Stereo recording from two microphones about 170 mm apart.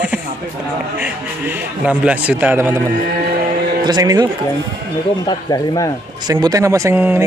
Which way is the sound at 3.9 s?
20° right (ahead or behind).